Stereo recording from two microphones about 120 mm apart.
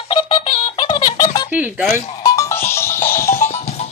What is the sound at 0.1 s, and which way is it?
Music, 45° left (ahead or behind).